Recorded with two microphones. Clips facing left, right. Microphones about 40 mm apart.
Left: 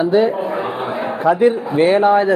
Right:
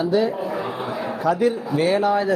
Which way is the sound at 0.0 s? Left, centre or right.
Left.